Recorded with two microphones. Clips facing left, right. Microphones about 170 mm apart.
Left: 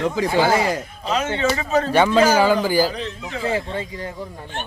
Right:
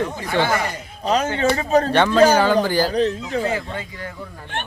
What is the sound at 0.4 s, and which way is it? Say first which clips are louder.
Speech: left 4 dB; 90° left.